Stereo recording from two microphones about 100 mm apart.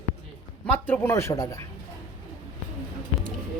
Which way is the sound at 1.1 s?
30° left (ahead or behind).